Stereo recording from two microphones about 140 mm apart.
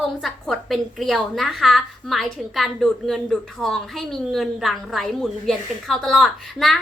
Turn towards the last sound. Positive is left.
turn(degrees=0)  # may be behind; listen again after turning